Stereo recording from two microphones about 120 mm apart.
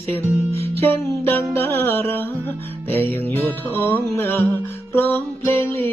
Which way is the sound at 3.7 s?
20° left (ahead or behind).